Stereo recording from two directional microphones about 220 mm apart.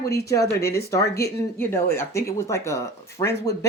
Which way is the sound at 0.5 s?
45° left (ahead or behind).